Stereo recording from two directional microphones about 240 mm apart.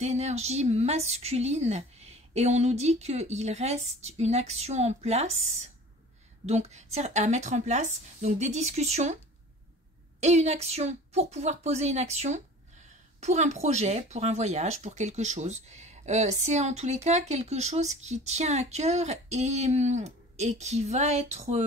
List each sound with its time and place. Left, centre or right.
0.0 s speech: right
10.2 s speech: right